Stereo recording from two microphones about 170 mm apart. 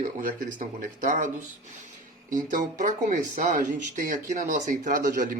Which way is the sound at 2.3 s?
50° right (ahead or behind).